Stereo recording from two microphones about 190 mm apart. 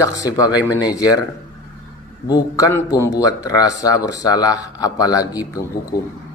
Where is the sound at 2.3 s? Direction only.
15° left (ahead or behind).